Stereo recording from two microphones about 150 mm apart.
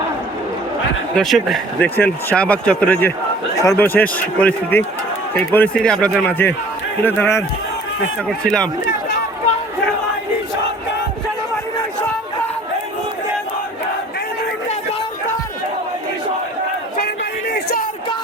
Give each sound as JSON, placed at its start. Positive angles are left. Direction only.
{"t": 1.1, "sound": "speech", "side_deg": 0}
{"t": 8.4, "sound": "speech", "side_deg": 5}